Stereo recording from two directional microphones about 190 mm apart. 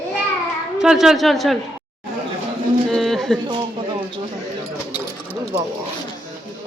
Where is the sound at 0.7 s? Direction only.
5° right (ahead or behind).